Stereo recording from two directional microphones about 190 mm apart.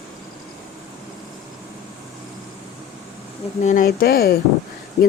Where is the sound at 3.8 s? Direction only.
55° left (ahead or behind).